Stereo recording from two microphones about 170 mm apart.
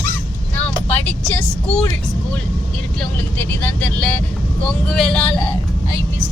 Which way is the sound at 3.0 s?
10° left (ahead or behind).